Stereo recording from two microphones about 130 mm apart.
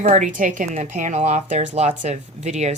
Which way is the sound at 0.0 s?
65° right (ahead or behind).